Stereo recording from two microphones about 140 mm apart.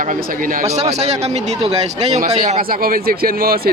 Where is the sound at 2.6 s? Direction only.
90° right.